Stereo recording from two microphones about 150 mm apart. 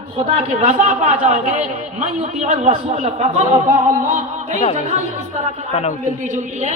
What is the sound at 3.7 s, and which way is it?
Music, 60° right (ahead or behind).